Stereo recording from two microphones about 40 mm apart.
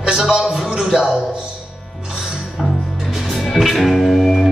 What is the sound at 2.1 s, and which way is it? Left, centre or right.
Music, centre.